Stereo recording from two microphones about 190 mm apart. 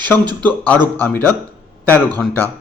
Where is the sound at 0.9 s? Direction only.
10° left (ahead or behind).